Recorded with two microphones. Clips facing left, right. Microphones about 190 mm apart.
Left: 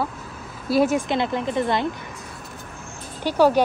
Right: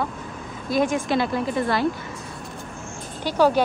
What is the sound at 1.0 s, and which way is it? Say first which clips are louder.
Speech: right 1 dB; 20° left (ahead or behind).